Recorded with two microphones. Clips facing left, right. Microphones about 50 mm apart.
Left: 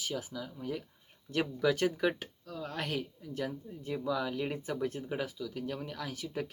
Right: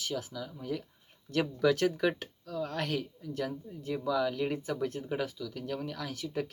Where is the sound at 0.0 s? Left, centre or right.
Centre.